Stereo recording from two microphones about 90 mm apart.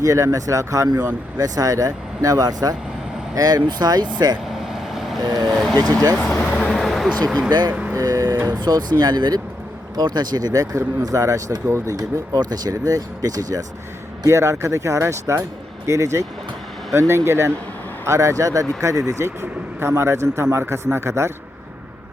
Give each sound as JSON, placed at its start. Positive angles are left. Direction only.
{"t": 0.0, "sound": "a man's voice", "side_deg": -35}
{"t": 4.4, "sound": "vehicle", "side_deg": 0}
{"t": 5.2, "sound": "a man's voice", "side_deg": -50}
{"t": 6.2, "sound": "vehicle", "side_deg": 5}
{"t": 7.7, "sound": "speech", "side_deg": -10}
{"t": 7.9, "sound": "vehicle", "side_deg": -40}
{"t": 8.4, "sound": "speech", "side_deg": -50}
{"t": 14.3, "sound": "a man's voice", "side_deg": -35}